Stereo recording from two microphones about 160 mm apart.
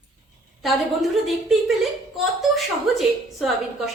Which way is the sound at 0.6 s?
Centre (ahead or behind).